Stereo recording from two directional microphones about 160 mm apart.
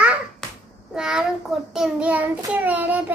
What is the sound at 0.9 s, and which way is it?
Child singing, 5° right (ahead or behind).